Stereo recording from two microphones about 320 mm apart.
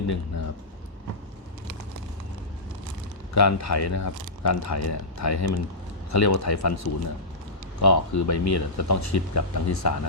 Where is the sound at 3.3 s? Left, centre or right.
Left.